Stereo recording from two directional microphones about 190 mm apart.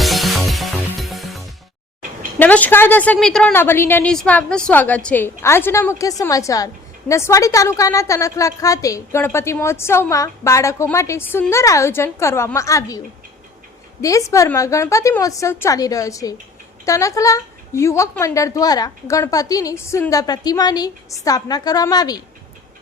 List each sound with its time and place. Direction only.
0.0 s music: centre (ahead or behind)
2.4 s a woman's voice: 10° left (ahead or behind)
14.0 s a woman's voice: 15° left (ahead or behind)